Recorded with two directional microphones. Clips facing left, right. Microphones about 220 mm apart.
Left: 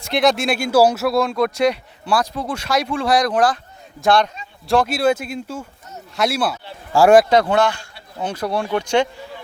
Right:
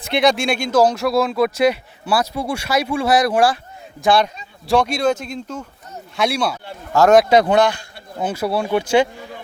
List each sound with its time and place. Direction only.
0.0 s speech: centre (ahead or behind)
7.3 s a man's voice: 15° right (ahead or behind)